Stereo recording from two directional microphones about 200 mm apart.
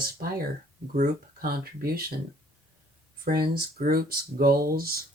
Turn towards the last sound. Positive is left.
turn(degrees=-50)  # may be behind; listen again after turning